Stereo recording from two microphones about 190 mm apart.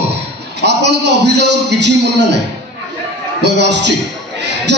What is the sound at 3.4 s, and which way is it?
Speech, 65° right (ahead or behind).